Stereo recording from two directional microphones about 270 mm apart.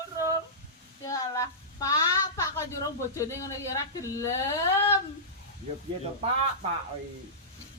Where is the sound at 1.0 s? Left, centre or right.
Centre.